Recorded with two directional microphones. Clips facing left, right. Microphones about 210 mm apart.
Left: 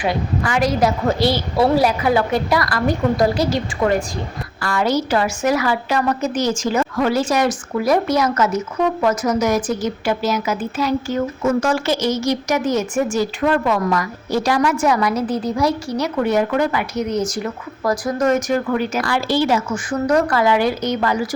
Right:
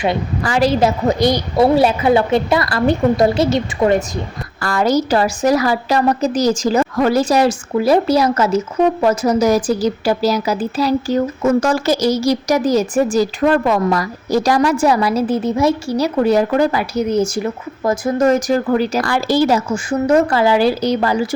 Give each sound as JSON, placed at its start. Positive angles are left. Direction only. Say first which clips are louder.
{"t": 0.4, "sound": "a woman's voice", "louder": "right 4 dB", "side_deg": -30}
{"t": 4.6, "sound": "a woman's voice", "louder": "right 3 dB", "side_deg": -40}
{"t": 19.9, "sound": "a woman's voice", "louder": "right 3 dB", "side_deg": -25}